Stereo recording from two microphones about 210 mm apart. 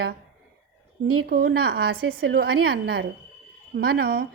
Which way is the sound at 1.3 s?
45° right (ahead or behind).